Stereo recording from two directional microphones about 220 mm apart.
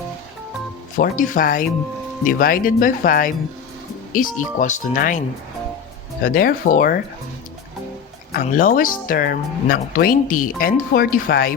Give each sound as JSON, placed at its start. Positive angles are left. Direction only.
{"t": 0.9, "sound": "speech", "side_deg": 35}
{"t": 6.2, "sound": "speech", "side_deg": 40}
{"t": 8.3, "sound": "speech", "side_deg": 40}